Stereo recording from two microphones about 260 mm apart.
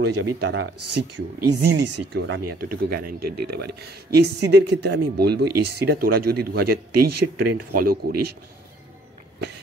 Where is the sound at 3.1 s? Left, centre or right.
Right.